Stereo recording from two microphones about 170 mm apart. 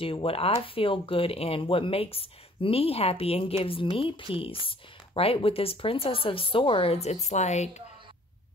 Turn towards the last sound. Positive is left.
turn(degrees=40)  # may be behind; listen again after turning